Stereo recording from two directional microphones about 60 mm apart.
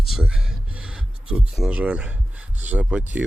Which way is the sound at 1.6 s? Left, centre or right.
Right.